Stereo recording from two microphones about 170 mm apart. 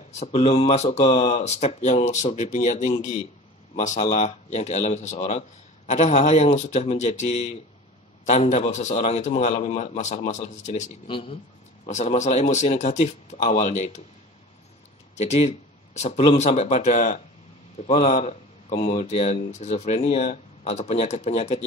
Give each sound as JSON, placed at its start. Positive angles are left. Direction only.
{"t": 0.2, "sound": "a man's voice", "side_deg": 40}
{"t": 11.1, "sound": "speech", "side_deg": 30}
{"t": 11.8, "sound": "a man's voice", "side_deg": 45}
{"t": 15.1, "sound": "speech", "side_deg": 40}